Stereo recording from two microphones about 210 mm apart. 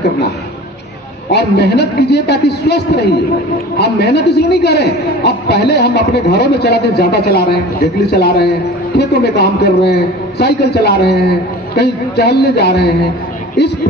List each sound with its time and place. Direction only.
1.3 s a man's voice: 50° left (ahead or behind)